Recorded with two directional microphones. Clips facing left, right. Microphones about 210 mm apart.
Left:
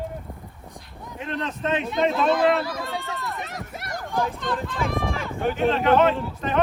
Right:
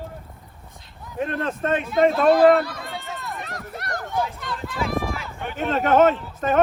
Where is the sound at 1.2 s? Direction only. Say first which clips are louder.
Right 3 dB; 50° right (ahead or behind).